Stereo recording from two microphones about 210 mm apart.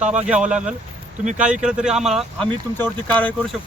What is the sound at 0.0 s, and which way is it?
Speech, 35° right (ahead or behind).